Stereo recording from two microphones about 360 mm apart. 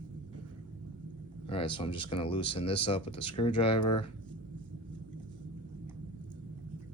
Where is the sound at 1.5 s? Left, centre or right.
Centre.